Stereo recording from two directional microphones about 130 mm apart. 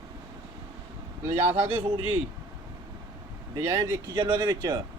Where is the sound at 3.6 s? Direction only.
15° right (ahead or behind).